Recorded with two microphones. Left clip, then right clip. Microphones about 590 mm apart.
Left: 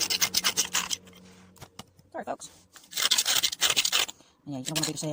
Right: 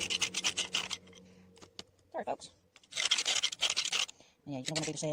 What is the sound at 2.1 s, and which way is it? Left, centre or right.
Speech, right.